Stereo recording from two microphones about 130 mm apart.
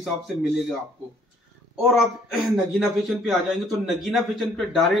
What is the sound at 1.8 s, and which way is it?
A man's voice, centre (ahead or behind).